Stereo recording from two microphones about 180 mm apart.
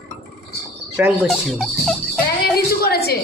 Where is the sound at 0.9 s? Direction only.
5° right (ahead or behind).